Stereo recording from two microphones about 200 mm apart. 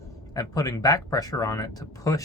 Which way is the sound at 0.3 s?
15° left (ahead or behind).